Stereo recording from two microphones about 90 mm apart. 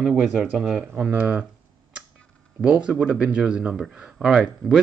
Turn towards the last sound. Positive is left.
turn(degrees=-5)  # may be behind; listen again after turning